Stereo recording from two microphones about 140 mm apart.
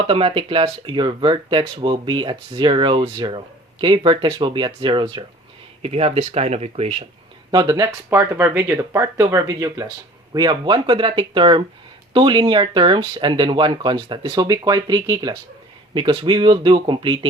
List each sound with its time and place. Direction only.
0.0 s speech: 40° right (ahead or behind)
7.5 s speech: 30° right (ahead or behind)